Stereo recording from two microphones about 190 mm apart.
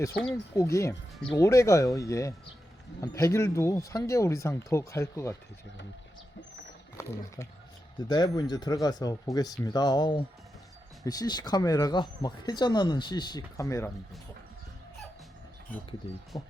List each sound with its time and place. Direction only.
0.1 s speech: 60° left (ahead or behind)
0.5 s speech: 15° left (ahead or behind)
8.0 s speech: 20° left (ahead or behind)
16.3 s speech: 20° left (ahead or behind)